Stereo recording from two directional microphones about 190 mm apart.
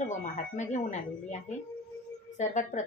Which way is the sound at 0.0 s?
40° left (ahead or behind).